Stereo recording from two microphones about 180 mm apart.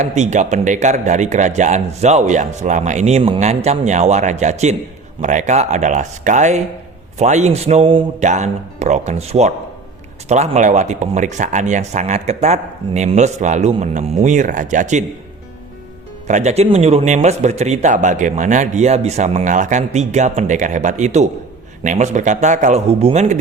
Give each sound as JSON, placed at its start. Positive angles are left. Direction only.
{"t": 0.0, "sound": "a man's voice", "side_deg": -40}
{"t": 16.2, "sound": "a man's voice", "side_deg": -40}